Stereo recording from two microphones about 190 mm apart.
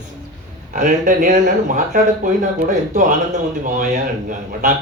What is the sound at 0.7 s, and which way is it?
Speech, 45° right (ahead or behind).